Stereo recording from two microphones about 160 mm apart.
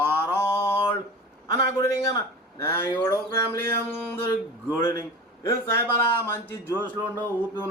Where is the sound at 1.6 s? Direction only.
20° left (ahead or behind).